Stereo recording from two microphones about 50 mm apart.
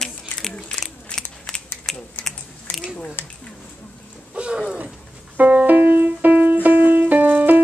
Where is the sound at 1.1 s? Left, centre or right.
Centre.